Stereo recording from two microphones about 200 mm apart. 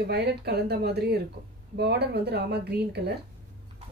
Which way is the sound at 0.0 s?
55° right (ahead or behind).